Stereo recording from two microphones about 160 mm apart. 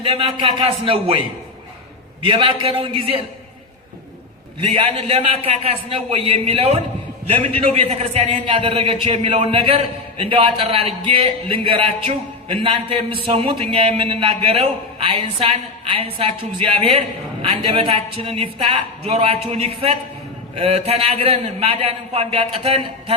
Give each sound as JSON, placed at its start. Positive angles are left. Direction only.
{"t": 0.0, "sound": "a man's voice", "side_deg": -35}
{"t": 2.2, "sound": "a man's voice", "side_deg": -35}
{"t": 4.6, "sound": "a man's voice", "side_deg": -40}